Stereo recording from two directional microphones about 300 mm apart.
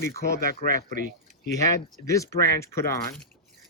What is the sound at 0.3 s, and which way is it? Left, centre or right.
Speech, right.